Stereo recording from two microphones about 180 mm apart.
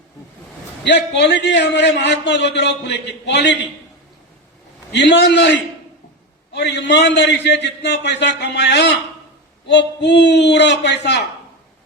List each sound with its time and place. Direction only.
0.9 s a man's voice: 70° left (ahead or behind)
4.9 s a man's voice: 70° left (ahead or behind)